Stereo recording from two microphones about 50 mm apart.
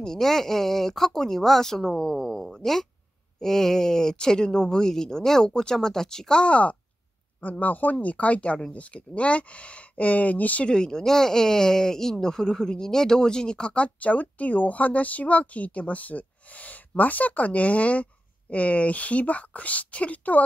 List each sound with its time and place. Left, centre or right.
0.0 s speech: centre
6.4 s speech: left
10.7 s speech: centre; by 20.4 s left